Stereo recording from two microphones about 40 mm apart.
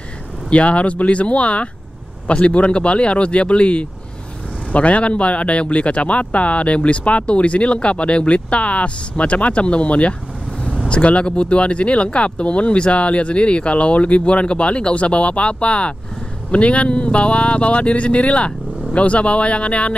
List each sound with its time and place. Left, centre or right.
0.5 s speech: left